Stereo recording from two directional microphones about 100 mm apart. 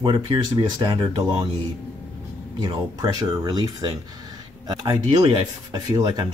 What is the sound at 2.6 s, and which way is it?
Speech, 45° right (ahead or behind).